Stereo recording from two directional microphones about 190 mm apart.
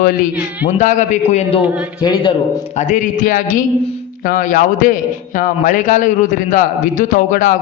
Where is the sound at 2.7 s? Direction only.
40° left (ahead or behind).